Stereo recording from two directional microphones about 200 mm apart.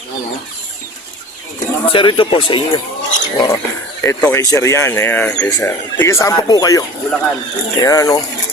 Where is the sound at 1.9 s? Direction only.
25° left (ahead or behind).